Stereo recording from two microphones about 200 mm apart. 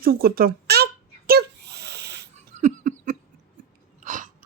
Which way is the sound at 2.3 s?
35° right (ahead or behind).